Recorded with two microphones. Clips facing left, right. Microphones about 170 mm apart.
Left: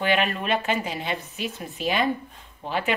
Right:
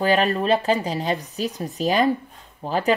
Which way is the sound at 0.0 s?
35° right (ahead or behind).